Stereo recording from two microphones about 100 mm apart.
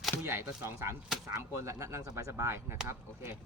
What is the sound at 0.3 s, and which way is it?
Speech, 20° right (ahead or behind).